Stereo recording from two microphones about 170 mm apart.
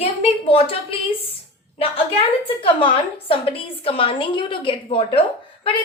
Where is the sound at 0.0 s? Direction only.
35° left (ahead or behind).